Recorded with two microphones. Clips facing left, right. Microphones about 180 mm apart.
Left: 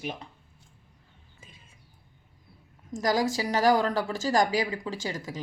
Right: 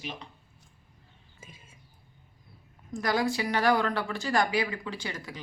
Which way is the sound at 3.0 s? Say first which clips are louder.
Left 2 dB; 40° left (ahead or behind).